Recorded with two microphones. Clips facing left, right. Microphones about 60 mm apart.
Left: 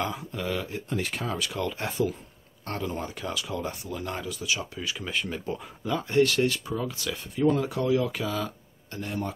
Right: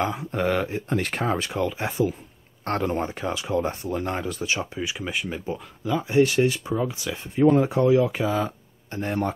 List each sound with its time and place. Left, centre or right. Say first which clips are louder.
0.0 s speech: right 5 dB; right
0.3 s speech: right 7 dB; right
1.2 s speech: right 6 dB; right
1.6 s speech: right 2 dB; centre
2.6 s speech: right 7 dB; right
3.0 s speech: right 5 dB; right
4.6 s speech: right 5 dB; right